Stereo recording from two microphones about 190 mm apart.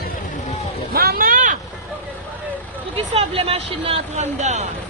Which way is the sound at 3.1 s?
30° right (ahead or behind).